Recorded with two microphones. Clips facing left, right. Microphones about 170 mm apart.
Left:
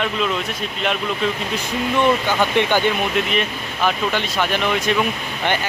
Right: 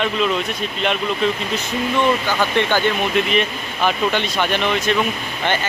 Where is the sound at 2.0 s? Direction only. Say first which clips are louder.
Left 1 dB; 15° left (ahead or behind).